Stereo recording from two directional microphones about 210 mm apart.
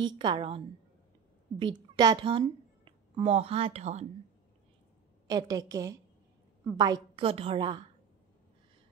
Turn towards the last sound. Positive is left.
turn(degrees=-25)  # may be behind; listen again after turning